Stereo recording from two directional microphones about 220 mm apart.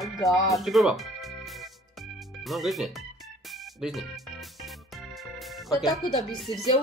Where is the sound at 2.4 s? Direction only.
Centre (ahead or behind).